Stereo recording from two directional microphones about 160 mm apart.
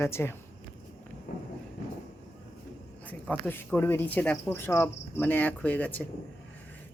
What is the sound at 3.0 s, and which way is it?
Speech, 10° left (ahead or behind).